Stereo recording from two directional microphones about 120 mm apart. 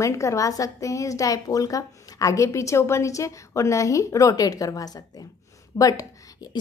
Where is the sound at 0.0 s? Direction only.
25° left (ahead or behind).